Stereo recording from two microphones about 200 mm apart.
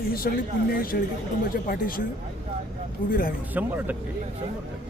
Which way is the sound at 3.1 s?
45° left (ahead or behind).